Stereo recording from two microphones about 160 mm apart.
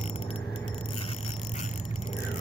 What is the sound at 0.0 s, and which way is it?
Keys jangling, 40° left (ahead or behind).